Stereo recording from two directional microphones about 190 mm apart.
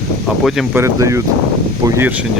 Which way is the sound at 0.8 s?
15° right (ahead or behind).